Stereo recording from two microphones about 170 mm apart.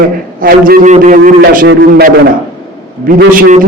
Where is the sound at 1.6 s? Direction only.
70° right (ahead or behind).